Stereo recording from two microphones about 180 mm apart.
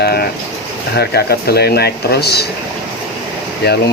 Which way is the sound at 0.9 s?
60° left (ahead or behind).